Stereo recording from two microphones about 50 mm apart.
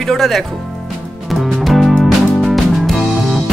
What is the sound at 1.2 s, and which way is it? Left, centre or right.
Music, centre.